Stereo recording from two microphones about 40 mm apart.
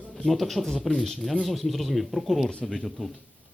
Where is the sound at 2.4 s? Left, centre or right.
Centre.